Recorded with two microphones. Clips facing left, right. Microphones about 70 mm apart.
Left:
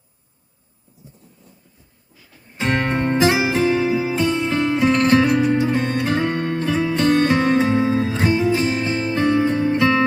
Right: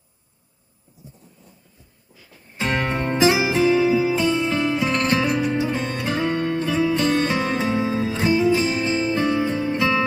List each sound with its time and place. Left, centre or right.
2.6 s music: left
3.2 s music: left